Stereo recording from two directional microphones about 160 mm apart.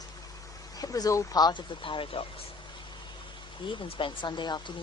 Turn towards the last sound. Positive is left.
turn(degrees=30)  # may be behind; listen again after turning